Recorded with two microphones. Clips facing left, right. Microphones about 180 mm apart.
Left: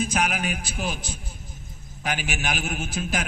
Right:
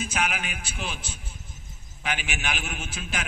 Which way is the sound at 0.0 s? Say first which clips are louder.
Left 4 dB; 40° left (ahead or behind).